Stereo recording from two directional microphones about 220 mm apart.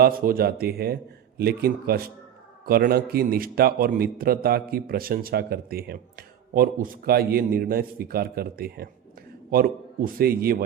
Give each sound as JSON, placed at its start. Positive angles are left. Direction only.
{"t": 0.0, "sound": "a man's voice", "side_deg": -45}